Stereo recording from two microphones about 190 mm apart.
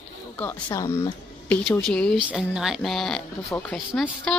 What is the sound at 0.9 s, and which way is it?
A woman's voice, 15° left (ahead or behind).